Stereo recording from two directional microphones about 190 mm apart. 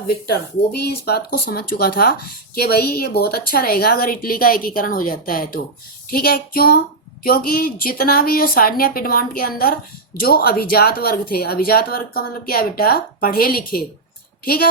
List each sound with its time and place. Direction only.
0.3 s speech: 55° left (ahead or behind)